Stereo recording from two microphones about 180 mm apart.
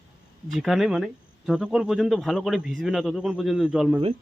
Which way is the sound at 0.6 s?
Centre (ahead or behind).